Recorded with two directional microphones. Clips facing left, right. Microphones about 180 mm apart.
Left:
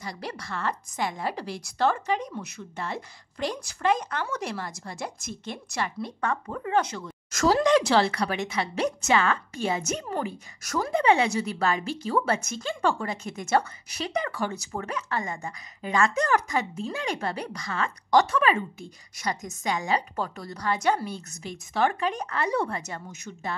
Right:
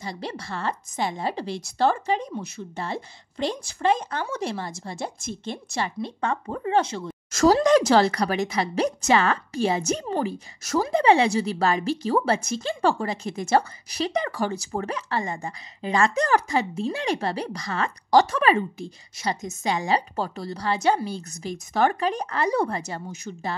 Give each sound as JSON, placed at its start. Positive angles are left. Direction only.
{"t": 0.0, "sound": "a woman's voice", "side_deg": -25}
{"t": 7.4, "sound": "a woman's voice", "side_deg": -40}